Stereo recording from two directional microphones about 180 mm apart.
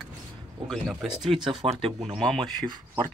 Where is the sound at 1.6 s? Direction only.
35° right (ahead or behind).